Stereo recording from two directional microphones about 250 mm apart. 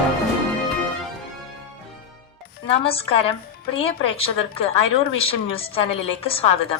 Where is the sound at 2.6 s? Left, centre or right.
Left.